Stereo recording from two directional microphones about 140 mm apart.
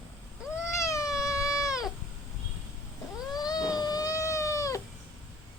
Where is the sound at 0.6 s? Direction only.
20° left (ahead or behind).